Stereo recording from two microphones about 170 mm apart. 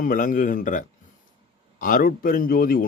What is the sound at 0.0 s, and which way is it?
A man's voice, 50° left (ahead or behind).